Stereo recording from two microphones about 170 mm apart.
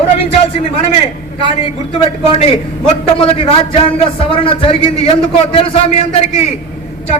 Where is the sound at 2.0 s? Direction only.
35° left (ahead or behind).